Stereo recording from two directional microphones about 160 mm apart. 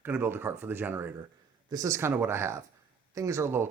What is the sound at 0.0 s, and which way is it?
Speech, 15° right (ahead or behind).